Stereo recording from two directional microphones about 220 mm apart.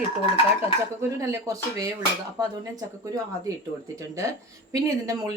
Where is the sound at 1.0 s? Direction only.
15° right (ahead or behind).